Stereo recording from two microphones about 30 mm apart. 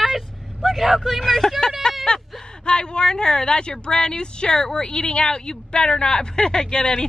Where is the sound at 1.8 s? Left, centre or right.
Left.